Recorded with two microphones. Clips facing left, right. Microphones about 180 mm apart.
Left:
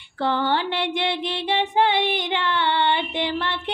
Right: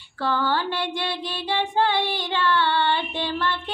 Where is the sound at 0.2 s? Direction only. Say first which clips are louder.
Left 2 dB; 20° left (ahead or behind).